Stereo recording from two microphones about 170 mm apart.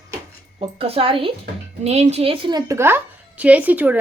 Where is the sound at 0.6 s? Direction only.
35° right (ahead or behind); by 3.9 s 10° right (ahead or behind).